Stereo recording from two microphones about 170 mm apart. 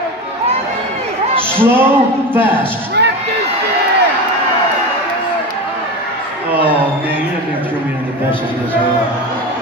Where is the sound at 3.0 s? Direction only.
80° right.